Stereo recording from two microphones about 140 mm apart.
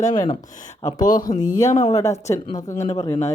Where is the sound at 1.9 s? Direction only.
20° left (ahead or behind).